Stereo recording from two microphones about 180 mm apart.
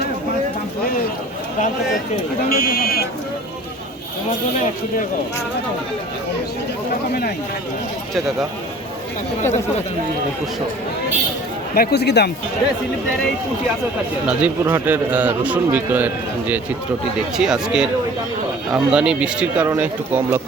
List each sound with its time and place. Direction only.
2.5 s a man's voice: 55° left (ahead or behind)
7.1 s a man's voice: 60° left (ahead or behind)
11.7 s a man's voice: 60° left (ahead or behind)
14.3 s a man's voice: 10° right (ahead or behind)